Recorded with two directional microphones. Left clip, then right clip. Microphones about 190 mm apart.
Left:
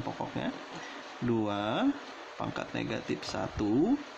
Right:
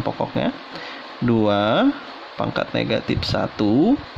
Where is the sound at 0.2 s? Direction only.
35° right (ahead or behind).